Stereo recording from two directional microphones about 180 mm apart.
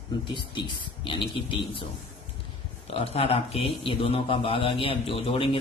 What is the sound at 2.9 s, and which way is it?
A man's voice, 30° left (ahead or behind).